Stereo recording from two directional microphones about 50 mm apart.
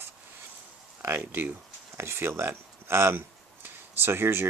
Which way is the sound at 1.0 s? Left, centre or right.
Right.